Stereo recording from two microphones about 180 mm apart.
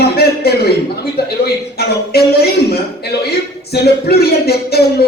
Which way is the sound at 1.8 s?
60° left (ahead or behind).